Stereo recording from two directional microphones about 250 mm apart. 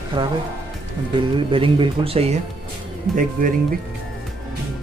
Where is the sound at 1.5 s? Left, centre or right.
Right.